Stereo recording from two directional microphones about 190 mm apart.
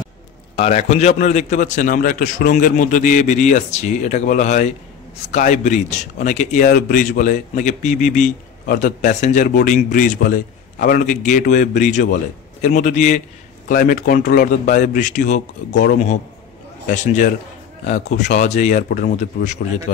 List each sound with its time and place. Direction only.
0.6 s a man's voice: 35° left (ahead or behind)
16.8 s a man's voice: 40° left (ahead or behind)